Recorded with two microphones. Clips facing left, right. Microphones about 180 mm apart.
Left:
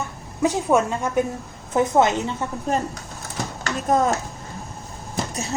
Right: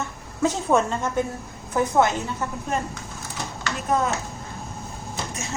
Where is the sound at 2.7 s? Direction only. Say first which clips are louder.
Left 3 dB; 35° left (ahead or behind).